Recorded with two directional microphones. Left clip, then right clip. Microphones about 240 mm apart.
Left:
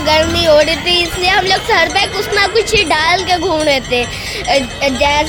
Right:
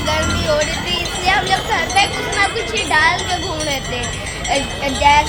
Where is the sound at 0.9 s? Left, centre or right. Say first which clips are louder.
Left 5 dB; left.